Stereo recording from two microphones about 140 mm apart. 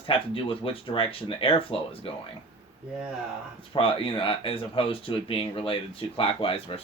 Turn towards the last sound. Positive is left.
turn(degrees=45)  # may be behind; listen again after turning